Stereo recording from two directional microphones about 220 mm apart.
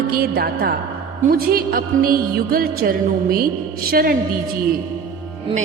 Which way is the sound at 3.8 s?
40° right (ahead or behind).